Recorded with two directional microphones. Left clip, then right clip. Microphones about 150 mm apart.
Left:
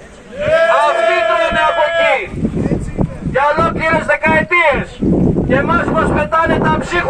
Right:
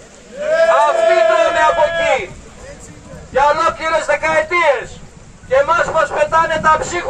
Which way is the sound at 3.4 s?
25° right (ahead or behind).